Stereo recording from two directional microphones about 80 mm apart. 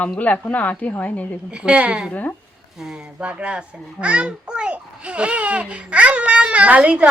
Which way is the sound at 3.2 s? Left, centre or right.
Centre.